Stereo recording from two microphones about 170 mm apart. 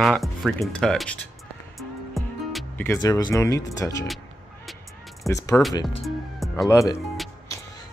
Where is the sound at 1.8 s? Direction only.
Centre (ahead or behind).